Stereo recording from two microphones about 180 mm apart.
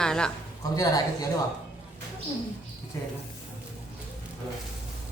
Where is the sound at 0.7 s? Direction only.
20° left (ahead or behind).